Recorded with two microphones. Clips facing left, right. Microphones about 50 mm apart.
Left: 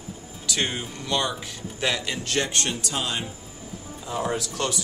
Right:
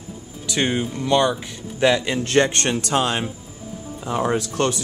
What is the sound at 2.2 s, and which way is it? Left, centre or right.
Speech, right.